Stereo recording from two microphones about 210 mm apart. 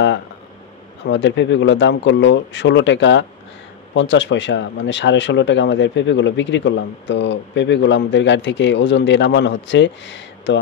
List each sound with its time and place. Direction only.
1.0 s speech: 60° left (ahead or behind)